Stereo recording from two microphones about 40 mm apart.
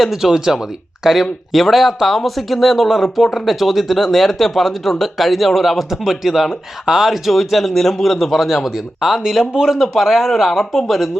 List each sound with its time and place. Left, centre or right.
0.0 s speech: centre
9.4 s speech: centre
9.6 s speech: centre